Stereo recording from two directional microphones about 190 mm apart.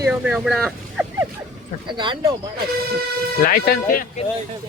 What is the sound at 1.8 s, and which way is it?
Speech, 25° right (ahead or behind).